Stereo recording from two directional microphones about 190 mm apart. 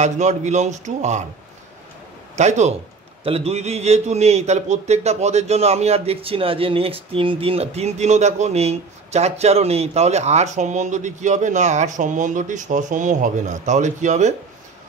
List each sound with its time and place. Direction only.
0.0 s a man's voice: 40° right (ahead or behind)
2.3 s a man's voice: 35° right (ahead or behind)